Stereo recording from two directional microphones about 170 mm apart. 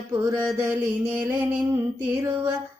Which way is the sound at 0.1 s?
15° right (ahead or behind).